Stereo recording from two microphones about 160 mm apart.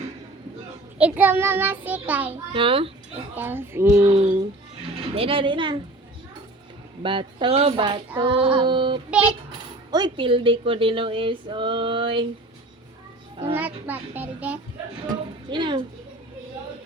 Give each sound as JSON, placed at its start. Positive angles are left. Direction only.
{"t": 0.9, "sound": "child singing", "side_deg": -10}
{"t": 2.5, "sound": "speech", "side_deg": -35}
{"t": 3.3, "sound": "child singing", "side_deg": -10}
{"t": 4.2, "sound": "speech", "side_deg": -35}
{"t": 7.0, "sound": "speech", "side_deg": -30}
{"t": 13.6, "sound": "child singing", "side_deg": -10}
{"t": 15.1, "sound": "speech", "side_deg": -30}